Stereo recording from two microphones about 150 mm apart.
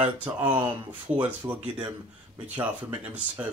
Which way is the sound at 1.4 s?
10° right (ahead or behind).